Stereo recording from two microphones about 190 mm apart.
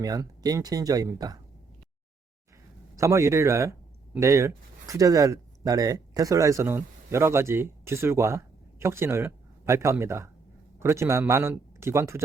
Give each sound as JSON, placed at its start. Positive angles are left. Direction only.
{"t": 0.0, "sound": "speech", "side_deg": -20}
{"t": 2.9, "sound": "speech", "side_deg": -15}